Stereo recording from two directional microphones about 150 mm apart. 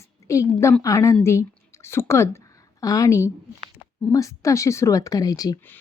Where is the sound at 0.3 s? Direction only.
20° left (ahead or behind).